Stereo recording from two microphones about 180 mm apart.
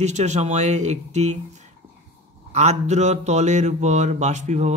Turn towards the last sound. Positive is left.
turn(degrees=-40)  # may be behind; listen again after turning